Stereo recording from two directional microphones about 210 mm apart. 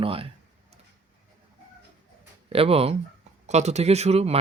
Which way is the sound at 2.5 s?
25° right (ahead or behind).